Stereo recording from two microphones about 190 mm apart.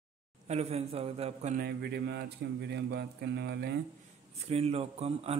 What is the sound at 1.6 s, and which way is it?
Speech, 60° right (ahead or behind).